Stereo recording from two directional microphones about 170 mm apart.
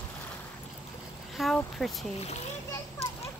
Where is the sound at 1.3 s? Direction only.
Centre (ahead or behind).